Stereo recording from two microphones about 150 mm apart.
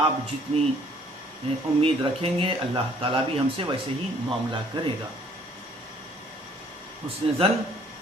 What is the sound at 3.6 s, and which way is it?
Speech, 40° right (ahead or behind).